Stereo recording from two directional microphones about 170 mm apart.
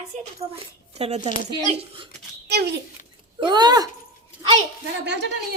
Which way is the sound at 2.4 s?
75° right (ahead or behind).